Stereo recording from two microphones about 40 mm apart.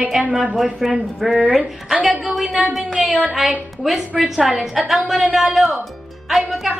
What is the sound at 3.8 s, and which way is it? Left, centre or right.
Speech, centre.